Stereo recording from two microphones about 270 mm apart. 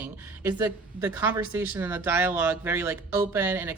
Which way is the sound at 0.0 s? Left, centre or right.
Centre.